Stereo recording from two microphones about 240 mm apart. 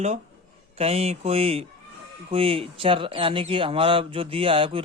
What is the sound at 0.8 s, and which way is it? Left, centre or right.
Speech, right.